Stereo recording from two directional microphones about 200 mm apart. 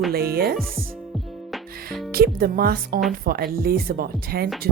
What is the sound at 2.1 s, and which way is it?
Speech, 50° right (ahead or behind).